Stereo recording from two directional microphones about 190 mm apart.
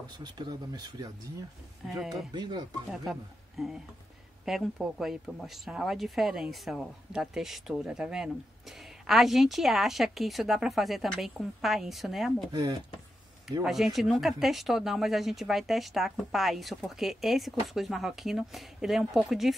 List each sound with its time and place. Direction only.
0.2 s speech: 20° right (ahead or behind)
2.3 s speech: 25° right (ahead or behind)
3.1 s a man's voice: centre (ahead or behind)
12.5 s speech: 25° right (ahead or behind)
13.7 s speech: centre (ahead or behind)